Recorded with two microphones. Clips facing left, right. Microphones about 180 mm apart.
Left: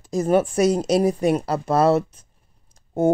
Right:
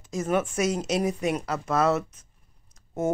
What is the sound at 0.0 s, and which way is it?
Speech, 35° left (ahead or behind).